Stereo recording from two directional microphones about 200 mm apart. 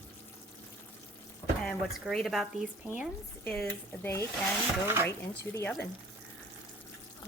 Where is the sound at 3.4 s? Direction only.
5° left (ahead or behind).